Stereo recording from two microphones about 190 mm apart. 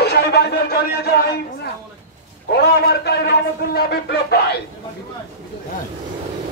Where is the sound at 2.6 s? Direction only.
55° left (ahead or behind).